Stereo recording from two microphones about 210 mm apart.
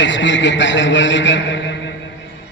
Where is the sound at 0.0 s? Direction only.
60° left (ahead or behind).